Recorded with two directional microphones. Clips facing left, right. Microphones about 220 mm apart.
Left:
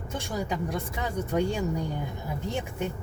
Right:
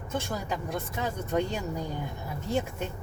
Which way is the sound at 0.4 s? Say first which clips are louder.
Left 2 dB; 10° left (ahead or behind).